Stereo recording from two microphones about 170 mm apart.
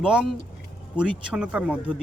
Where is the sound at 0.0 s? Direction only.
5° right (ahead or behind).